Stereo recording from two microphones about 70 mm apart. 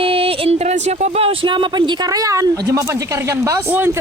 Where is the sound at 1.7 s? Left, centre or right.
Right.